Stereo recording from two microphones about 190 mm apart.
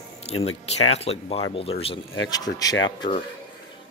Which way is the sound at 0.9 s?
30° left (ahead or behind).